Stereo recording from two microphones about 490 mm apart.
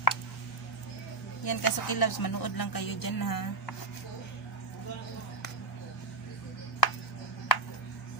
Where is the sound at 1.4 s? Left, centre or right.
Left.